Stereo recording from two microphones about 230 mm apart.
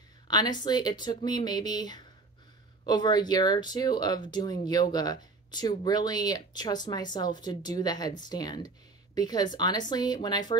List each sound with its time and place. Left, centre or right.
0.3 s speech: centre